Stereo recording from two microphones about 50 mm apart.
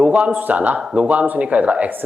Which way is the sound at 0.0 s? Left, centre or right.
Right.